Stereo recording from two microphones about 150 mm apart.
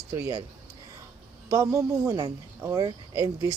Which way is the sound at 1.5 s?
25° right (ahead or behind).